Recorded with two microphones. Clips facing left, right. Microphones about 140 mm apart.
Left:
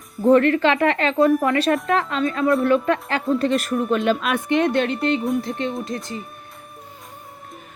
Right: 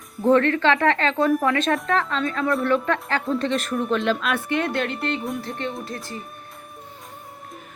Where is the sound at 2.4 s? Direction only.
5° left (ahead or behind).